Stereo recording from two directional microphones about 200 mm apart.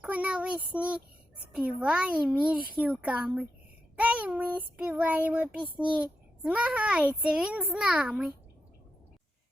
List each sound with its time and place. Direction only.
0.0 s child singing: 5° right (ahead or behind)
1.5 s a child's voice: 5° right (ahead or behind)
3.0 s child singing: 5° right (ahead or behind)
5.7 s a child's voice: 5° right (ahead or behind)